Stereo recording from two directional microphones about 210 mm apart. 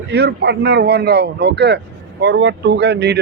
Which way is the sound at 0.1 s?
55° right (ahead or behind).